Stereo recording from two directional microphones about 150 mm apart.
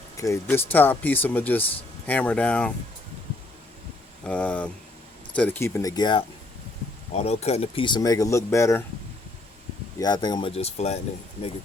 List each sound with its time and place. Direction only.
0.4 s speech: 10° left (ahead or behind)
4.2 s speech: 10° left (ahead or behind)
6.0 s speech: 30° left (ahead or behind)
7.1 s speech: 45° left (ahead or behind); by 8.8 s 20° left (ahead or behind)
10.0 s speech: 30° left (ahead or behind); by 11.0 s 45° left (ahead or behind)